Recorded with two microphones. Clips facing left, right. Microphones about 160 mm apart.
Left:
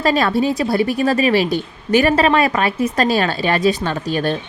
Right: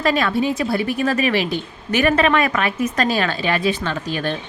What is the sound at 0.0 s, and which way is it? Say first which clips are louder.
A woman's voice: left 2 dB; 35° left (ahead or behind).